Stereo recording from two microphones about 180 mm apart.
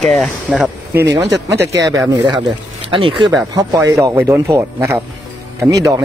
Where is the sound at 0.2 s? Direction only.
5° right (ahead or behind).